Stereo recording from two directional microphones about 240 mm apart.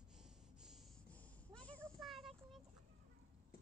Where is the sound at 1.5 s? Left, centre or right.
Centre.